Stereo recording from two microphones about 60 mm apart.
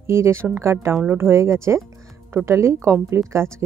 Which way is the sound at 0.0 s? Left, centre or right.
Right.